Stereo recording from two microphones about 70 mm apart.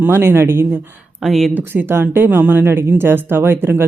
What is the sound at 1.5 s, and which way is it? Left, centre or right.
Speech, right.